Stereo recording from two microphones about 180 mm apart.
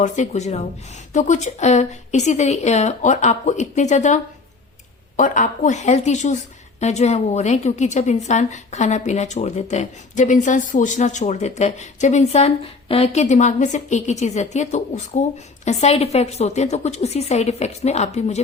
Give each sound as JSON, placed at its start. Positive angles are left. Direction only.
{"t": 0.0, "sound": "a woman's voice", "side_deg": 40}